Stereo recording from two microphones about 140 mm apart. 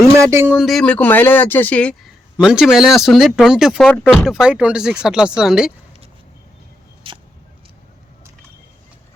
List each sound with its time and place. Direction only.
0.2 s speech: 20° right (ahead or behind)
0.5 s speech: centre (ahead or behind)
2.4 s speech: 5° right (ahead or behind)
7.1 s a sound: 40° right (ahead or behind)